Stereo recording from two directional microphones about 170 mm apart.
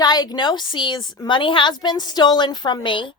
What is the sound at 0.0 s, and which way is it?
Speech, 25° left (ahead or behind).